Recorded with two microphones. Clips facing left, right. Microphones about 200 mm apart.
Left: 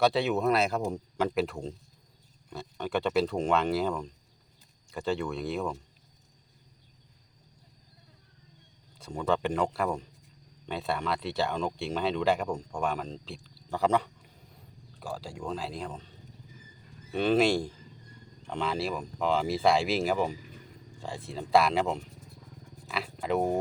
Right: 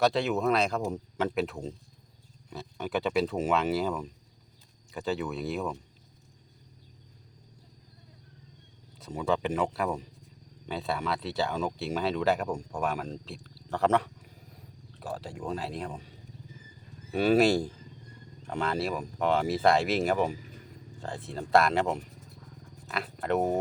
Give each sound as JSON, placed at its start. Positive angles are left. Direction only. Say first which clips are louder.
{"t": 0.0, "sound": "speech", "louder": "left 1 dB", "side_deg": 0}
{"t": 9.0, "sound": "speech", "louder": "even", "side_deg": 0}